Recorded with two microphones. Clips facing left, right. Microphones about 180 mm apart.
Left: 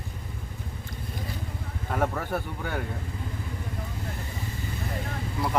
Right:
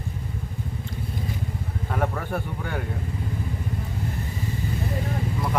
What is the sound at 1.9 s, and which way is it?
Speech, 5° left (ahead or behind).